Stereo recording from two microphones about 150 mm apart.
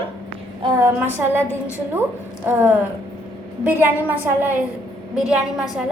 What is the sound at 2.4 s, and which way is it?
A woman's voice, 15° right (ahead or behind).